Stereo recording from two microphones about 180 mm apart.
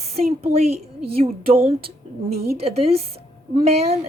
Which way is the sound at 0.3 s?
35° right (ahead or behind).